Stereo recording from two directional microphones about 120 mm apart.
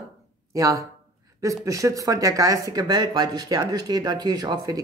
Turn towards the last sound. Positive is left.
turn(degrees=-35)  # may be behind; listen again after turning